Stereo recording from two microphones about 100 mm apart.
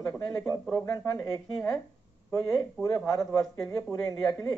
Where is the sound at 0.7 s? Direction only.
30° left (ahead or behind).